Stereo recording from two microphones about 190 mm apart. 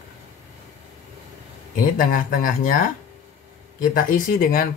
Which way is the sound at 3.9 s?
45° left (ahead or behind).